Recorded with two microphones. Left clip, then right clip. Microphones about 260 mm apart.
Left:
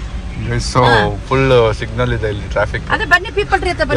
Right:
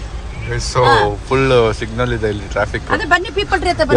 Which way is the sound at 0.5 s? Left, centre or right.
Centre.